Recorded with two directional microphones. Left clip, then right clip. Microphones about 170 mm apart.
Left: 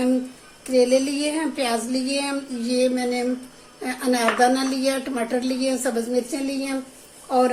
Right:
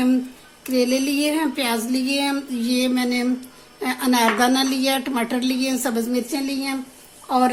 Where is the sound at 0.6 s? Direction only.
60° right (ahead or behind).